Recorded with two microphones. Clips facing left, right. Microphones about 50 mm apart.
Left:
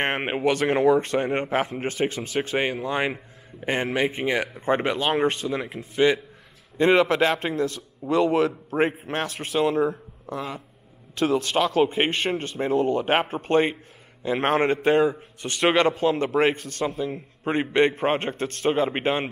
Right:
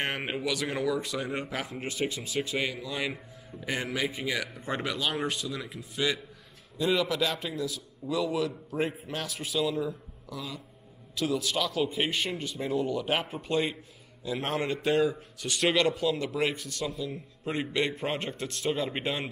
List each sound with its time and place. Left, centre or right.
0.0 s a man's voice: left